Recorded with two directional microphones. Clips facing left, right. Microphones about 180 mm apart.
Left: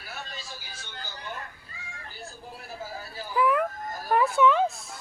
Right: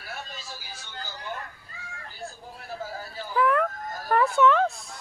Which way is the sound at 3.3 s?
5° left (ahead or behind).